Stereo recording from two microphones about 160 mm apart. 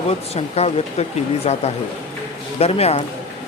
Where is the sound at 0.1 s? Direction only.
40° left (ahead or behind).